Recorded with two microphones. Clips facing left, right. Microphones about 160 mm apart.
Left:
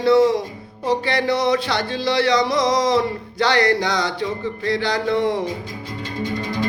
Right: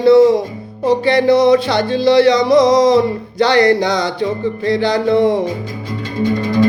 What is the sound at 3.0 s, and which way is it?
Music, 25° right (ahead or behind).